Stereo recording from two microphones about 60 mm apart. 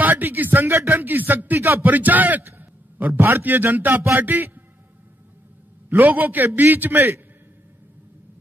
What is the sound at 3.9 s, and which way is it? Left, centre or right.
Speech, right.